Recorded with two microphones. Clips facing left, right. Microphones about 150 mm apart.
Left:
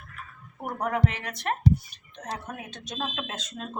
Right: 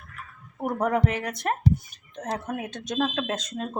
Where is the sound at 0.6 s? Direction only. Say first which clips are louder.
Right 3 dB; 45° right (ahead or behind).